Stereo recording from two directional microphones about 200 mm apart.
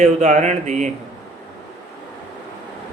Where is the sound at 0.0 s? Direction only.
35° right (ahead or behind).